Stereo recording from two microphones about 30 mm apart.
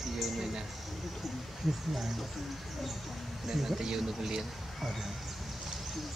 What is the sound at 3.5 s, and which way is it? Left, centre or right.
Speech, centre.